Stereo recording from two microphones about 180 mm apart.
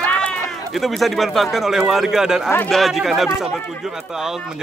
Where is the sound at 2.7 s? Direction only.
Centre (ahead or behind).